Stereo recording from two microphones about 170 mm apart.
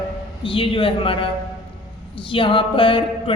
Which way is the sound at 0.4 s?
30° left (ahead or behind).